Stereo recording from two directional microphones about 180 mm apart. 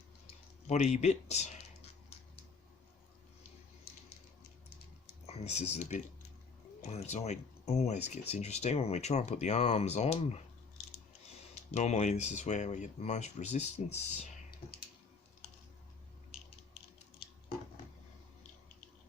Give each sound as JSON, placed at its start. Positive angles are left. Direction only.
{"t": 0.7, "sound": "speech", "side_deg": 40}
{"t": 5.2, "sound": "speech", "side_deg": 35}
{"t": 11.7, "sound": "speech", "side_deg": 40}